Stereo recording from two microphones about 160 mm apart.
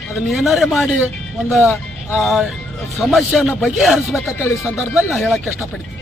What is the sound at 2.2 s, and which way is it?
A man's voice, centre (ahead or behind).